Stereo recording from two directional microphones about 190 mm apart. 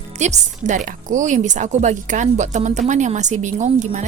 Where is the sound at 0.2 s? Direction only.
40° right (ahead or behind).